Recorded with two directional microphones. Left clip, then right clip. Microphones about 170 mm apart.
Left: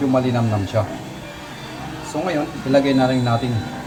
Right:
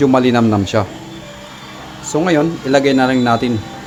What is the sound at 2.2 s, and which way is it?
Speech, 70° right (ahead or behind).